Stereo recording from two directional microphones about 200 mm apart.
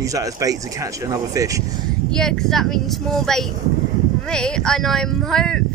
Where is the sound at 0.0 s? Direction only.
15° right (ahead or behind).